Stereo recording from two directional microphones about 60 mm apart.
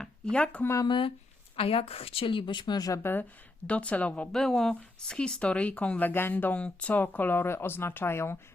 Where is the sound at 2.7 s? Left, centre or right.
Left.